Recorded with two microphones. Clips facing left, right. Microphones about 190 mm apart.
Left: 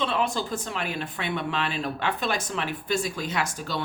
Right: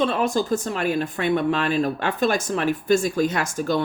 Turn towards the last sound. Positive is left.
turn(degrees=-50)  # may be behind; listen again after turning